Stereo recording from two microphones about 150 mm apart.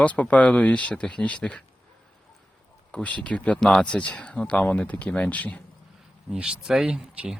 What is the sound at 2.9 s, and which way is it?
Speech, 10° left (ahead or behind).